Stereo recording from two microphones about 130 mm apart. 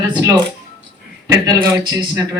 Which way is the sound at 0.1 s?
30° right (ahead or behind).